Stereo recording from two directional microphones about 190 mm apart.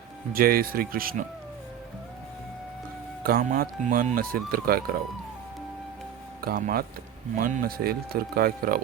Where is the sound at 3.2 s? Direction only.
50° right (ahead or behind).